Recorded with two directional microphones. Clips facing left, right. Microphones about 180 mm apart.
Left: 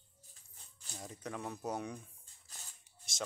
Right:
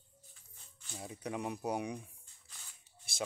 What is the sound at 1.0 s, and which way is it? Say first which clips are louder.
Speech: right 3 dB; 10° right (ahead or behind).